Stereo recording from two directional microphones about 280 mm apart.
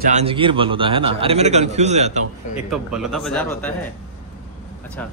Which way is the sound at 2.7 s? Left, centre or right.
Centre.